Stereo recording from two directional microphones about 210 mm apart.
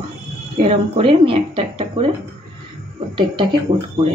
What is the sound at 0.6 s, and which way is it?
Speech, 30° right (ahead or behind).